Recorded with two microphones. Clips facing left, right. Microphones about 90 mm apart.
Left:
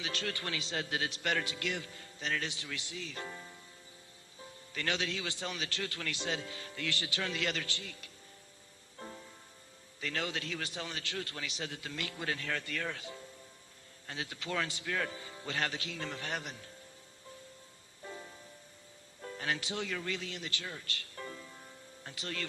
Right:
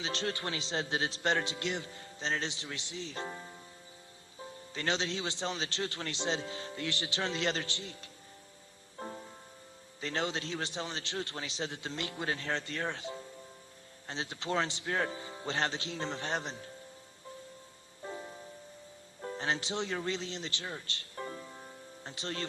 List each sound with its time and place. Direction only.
0.0 s a man's voice: 25° right (ahead or behind)
9.0 s music: 30° right (ahead or behind)
10.0 s a man's voice: 25° right (ahead or behind)
18.0 s music: 25° right (ahead or behind)
19.2 s speech: 30° right (ahead or behind)